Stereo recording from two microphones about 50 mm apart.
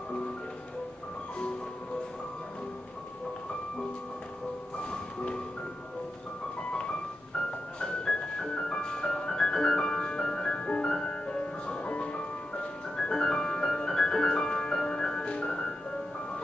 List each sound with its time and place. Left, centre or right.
4.7 s music: centre
6.7 s music: centre